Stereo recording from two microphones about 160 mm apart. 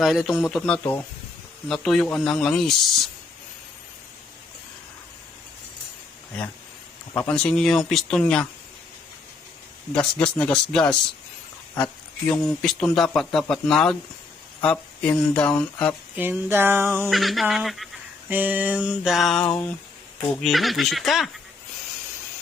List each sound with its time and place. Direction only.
0.0 s speech: centre (ahead or behind)
7.2 s speech: 5° left (ahead or behind)
9.9 s speech: 5° left (ahead or behind)
12.3 s speech: 5° left (ahead or behind)
16.1 s music: 10° right (ahead or behind)
17.1 s speech: centre (ahead or behind)
18.3 s music: 10° right (ahead or behind)
20.3 s speech: centre (ahead or behind)